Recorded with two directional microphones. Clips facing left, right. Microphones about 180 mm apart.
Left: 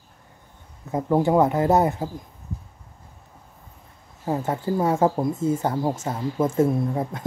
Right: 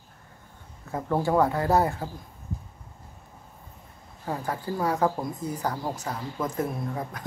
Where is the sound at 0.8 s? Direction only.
20° left (ahead or behind).